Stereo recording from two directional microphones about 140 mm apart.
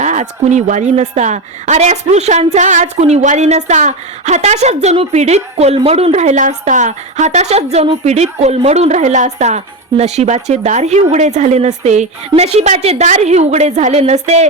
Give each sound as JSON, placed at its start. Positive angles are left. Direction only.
{"t": 0.0, "sound": "a woman's voice", "side_deg": -55}